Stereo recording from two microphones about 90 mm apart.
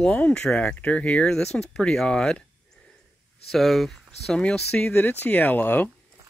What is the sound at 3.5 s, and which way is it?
Speech, centre (ahead or behind).